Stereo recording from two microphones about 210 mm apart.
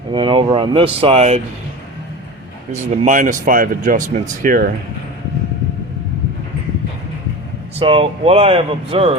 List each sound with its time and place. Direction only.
0.1 s speech: 25° right (ahead or behind)
3.0 s speech: 40° right (ahead or behind)
7.8 s speech: 25° right (ahead or behind)